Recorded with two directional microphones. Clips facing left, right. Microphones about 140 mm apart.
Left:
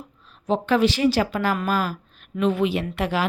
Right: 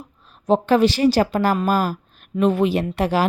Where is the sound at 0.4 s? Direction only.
40° right (ahead or behind).